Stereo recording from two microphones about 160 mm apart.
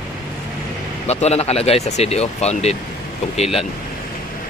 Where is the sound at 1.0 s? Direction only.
40° left (ahead or behind).